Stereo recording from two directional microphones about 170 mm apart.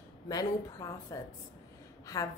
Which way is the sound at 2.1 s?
20° left (ahead or behind).